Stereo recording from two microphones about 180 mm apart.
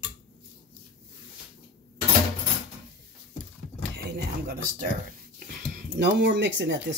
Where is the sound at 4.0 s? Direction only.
65° right (ahead or behind).